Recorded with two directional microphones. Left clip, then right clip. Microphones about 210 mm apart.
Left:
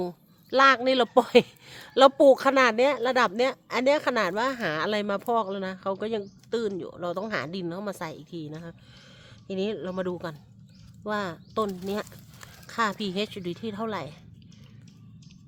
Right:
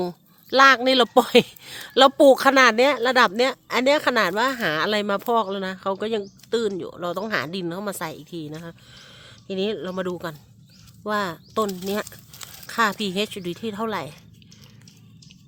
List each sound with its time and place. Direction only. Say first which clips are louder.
0.0 s speech: right 4 dB; 40° right (ahead or behind)